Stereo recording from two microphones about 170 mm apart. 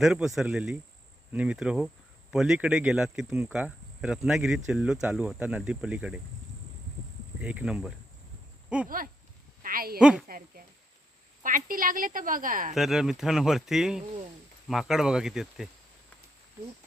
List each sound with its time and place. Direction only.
0.0 s speech: 5° right (ahead or behind)
7.4 s speech: 5° right (ahead or behind)
9.6 s a woman's voice: 60° right (ahead or behind)
10.0 s speech: 5° right (ahead or behind)
11.4 s a woman's voice: 55° right (ahead or behind)
12.7 s speech: centre (ahead or behind)